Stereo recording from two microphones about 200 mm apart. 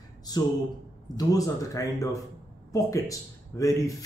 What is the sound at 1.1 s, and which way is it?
Speech, 15° left (ahead or behind).